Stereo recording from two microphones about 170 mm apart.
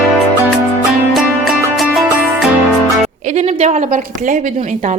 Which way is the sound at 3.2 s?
45° right (ahead or behind).